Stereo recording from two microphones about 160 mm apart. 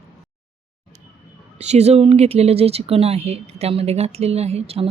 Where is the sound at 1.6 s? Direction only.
40° right (ahead or behind).